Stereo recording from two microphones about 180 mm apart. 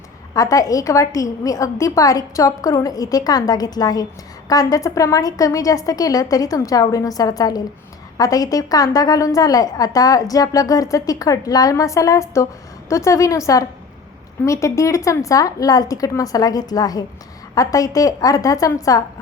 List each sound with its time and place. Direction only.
0.3 s a woman's voice: 20° left (ahead or behind)